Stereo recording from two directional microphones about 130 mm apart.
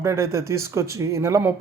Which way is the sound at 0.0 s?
20° right (ahead or behind).